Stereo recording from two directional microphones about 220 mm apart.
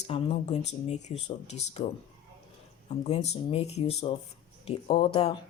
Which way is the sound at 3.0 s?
30° left (ahead or behind).